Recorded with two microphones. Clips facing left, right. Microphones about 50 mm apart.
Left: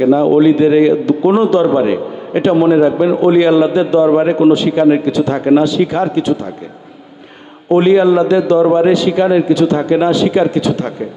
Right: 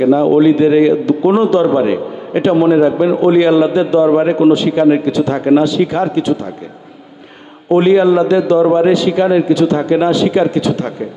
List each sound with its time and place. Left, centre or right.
0.0 s a man's voice: left
4.5 s a man's voice: left
4.8 s a man's voice: left
7.7 s a man's voice: left
8.5 s a man's voice: left
8.9 s a man's voice: left